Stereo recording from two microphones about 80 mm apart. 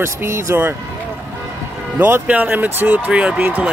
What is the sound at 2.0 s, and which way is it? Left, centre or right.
Speech, right.